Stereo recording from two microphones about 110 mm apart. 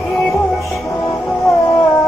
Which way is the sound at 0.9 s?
25° left (ahead or behind).